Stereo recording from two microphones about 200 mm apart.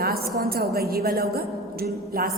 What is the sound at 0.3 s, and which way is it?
A woman's voice, 50° right (ahead or behind).